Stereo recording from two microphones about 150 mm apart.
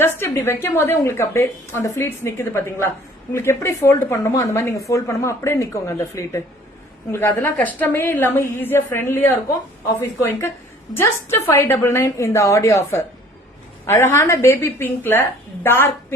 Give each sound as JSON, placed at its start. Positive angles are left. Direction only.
{"t": 0.0, "sound": "a woman's voice", "side_deg": 15}